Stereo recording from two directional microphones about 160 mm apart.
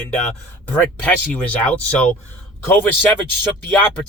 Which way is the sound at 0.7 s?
10° left (ahead or behind).